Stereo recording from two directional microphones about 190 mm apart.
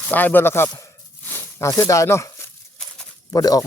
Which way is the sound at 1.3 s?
15° left (ahead or behind).